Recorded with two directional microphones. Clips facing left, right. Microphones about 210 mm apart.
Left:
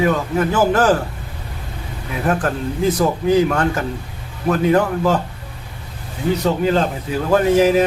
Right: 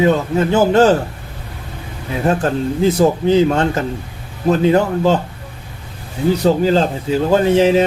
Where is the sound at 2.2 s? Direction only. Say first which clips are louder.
Right 3 dB; 25° right (ahead or behind).